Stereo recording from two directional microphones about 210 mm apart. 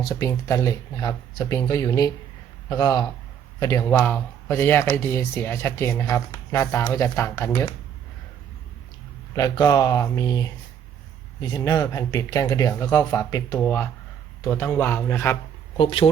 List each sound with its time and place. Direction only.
0.0 s speech: 15° left (ahead or behind)
9.3 s speech: 15° left (ahead or behind)
15.8 s speech: 25° left (ahead or behind)